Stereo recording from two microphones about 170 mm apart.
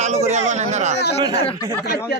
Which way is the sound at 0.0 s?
40° right (ahead or behind).